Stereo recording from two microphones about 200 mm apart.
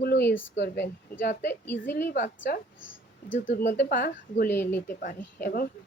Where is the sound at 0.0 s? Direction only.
55° left (ahead or behind).